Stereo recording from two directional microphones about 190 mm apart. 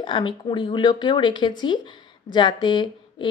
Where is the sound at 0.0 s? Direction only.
25° left (ahead or behind).